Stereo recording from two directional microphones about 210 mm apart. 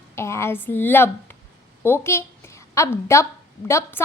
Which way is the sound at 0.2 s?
10° left (ahead or behind).